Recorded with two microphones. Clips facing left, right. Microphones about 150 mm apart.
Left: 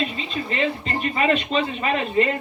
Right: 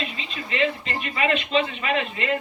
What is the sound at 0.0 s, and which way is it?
Speech, 40° left (ahead or behind).